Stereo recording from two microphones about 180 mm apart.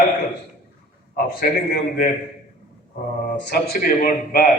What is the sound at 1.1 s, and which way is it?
Speech, 55° left (ahead or behind).